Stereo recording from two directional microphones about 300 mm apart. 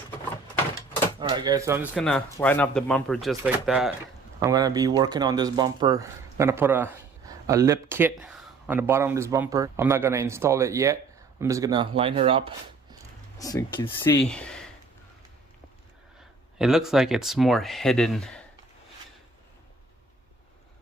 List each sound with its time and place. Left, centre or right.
1.2 s speech: centre
13.4 s speech: centre
16.6 s speech: centre